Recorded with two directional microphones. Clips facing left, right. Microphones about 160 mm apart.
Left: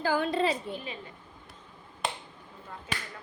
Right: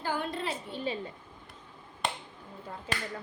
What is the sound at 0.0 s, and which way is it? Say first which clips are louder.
Speech: left 6 dB; 90° left.